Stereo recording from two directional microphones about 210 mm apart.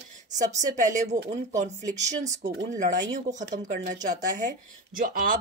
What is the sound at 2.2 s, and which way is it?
Speech, 35° right (ahead or behind).